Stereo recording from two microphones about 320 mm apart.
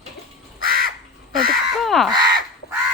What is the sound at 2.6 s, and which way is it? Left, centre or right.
Crow, left.